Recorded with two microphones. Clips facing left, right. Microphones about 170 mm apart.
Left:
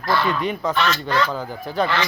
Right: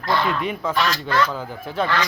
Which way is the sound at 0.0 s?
20° right (ahead or behind).